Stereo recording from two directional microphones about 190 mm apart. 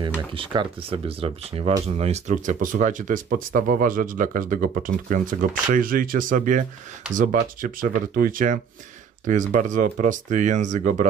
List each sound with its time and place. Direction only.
0.0 s speech: 25° right (ahead or behind); by 11.1 s 40° right (ahead or behind)